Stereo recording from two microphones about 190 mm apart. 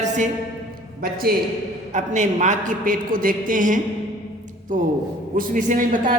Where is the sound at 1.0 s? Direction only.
50° right (ahead or behind).